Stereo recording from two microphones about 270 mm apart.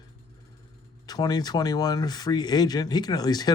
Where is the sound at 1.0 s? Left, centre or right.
Centre.